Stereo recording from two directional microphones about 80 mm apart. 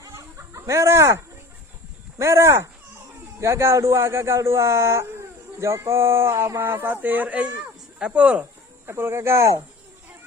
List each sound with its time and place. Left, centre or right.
0.0 s chicken: right
2.1 s speech: right; by 8.4 s centre
8.9 s speech: right